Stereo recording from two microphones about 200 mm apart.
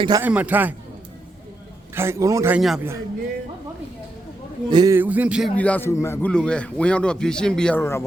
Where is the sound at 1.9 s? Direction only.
15° right (ahead or behind).